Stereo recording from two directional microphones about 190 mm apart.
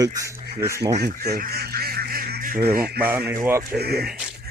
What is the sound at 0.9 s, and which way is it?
Goose, 55° right (ahead or behind).